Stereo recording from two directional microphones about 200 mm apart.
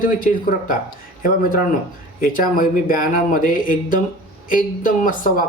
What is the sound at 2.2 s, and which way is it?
Speech, 45° left (ahead or behind).